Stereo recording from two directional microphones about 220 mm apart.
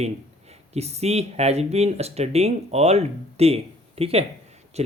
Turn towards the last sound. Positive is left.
turn(degrees=-30)  # may be behind; listen again after turning